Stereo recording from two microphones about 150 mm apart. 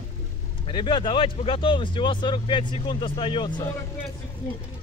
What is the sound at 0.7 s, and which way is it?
Speech, 35° left (ahead or behind).